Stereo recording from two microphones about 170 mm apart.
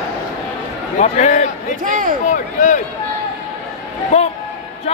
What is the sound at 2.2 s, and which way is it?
Speech, 50° left (ahead or behind).